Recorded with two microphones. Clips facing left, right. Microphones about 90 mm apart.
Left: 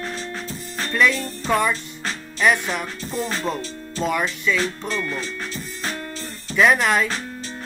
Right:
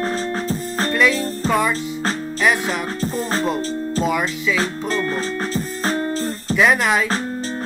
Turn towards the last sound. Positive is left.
turn(degrees=0)  # may be behind; listen again after turning